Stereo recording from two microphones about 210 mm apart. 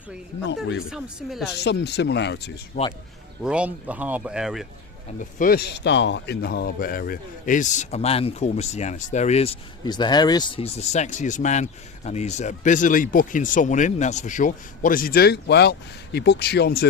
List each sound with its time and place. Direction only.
0.4 s speech: 60° left (ahead or behind)
0.9 s speech: centre (ahead or behind)
1.5 s speech: 55° left (ahead or behind)
2.8 s speech: 35° left (ahead or behind)
3.4 s speech: 5° right (ahead or behind)
5.2 s speech: 40° left (ahead or behind)